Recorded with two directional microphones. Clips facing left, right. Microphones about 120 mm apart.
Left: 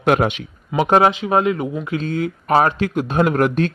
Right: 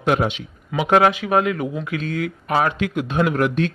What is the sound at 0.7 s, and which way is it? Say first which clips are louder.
Speech: left 1 dB; 30° left (ahead or behind).